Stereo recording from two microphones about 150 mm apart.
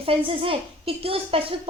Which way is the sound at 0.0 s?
40° right (ahead or behind).